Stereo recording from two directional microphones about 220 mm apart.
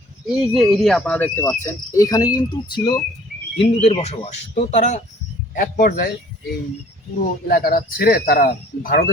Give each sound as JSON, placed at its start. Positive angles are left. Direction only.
{"t": 0.3, "sound": "cricket", "side_deg": 0}
{"t": 3.6, "sound": "speech", "side_deg": 25}
{"t": 7.4, "sound": "speech", "side_deg": 45}